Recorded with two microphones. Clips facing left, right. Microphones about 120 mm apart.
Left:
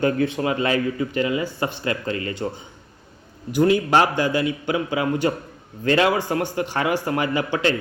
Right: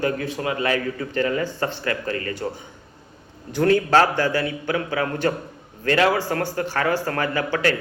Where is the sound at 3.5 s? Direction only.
10° left (ahead or behind).